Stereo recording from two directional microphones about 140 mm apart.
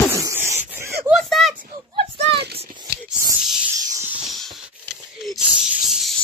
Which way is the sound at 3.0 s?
5° right (ahead or behind).